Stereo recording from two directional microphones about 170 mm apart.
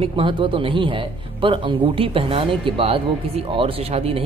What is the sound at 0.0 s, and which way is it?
Speech, 30° right (ahead or behind).